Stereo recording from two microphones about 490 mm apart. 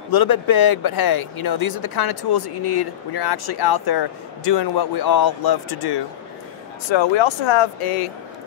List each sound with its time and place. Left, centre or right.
0.1 s speech: left
6.9 s speech: left